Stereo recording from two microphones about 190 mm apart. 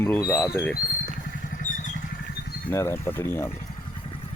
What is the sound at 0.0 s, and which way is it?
Speech, 10° left (ahead or behind).